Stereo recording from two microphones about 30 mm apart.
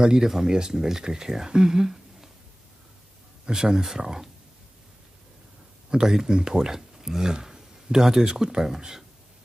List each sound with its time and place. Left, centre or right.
0.0 s speech: right
3.5 s speech: right
6.0 s speech: centre
6.3 s speech: right